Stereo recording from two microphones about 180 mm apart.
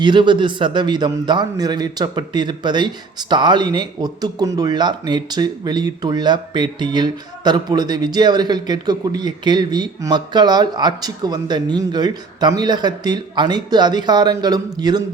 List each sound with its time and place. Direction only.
0.0 s a man's voice: 25° right (ahead or behind)